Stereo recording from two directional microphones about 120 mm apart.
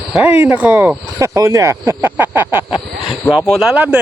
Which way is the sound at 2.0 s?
15° right (ahead or behind).